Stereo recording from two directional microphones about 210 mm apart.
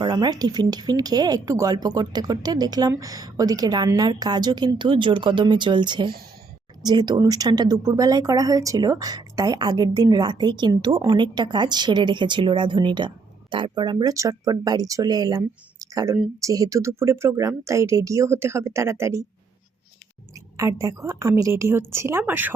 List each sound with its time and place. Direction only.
0.0 s a woman's voice: 20° right (ahead or behind)
20.6 s a woman's voice: 15° right (ahead or behind)